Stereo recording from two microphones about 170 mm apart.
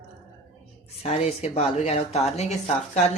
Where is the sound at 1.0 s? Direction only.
40° left (ahead or behind).